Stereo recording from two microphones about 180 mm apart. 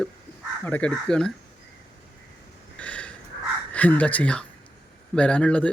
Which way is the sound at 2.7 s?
5° left (ahead or behind).